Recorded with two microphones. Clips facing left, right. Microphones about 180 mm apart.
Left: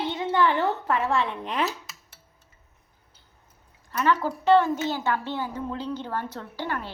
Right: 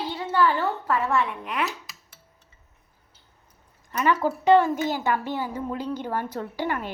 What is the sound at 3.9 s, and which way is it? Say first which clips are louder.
A woman's voice: right 1 dB; 15° right (ahead or behind).